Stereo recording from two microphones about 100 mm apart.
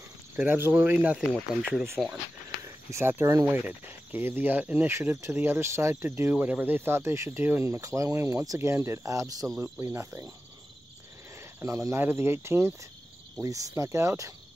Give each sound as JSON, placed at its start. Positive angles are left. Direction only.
{"t": 0.4, "sound": "speech", "side_deg": -20}
{"t": 2.6, "sound": "speech", "side_deg": -30}
{"t": 6.3, "sound": "speech", "side_deg": -15}
{"t": 9.6, "sound": "speech", "side_deg": -25}
{"t": 11.3, "sound": "cricket", "side_deg": -30}
{"t": 12.0, "sound": "speech", "side_deg": -20}